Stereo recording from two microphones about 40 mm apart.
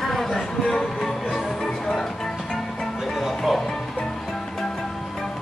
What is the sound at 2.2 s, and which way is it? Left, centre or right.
Music, centre.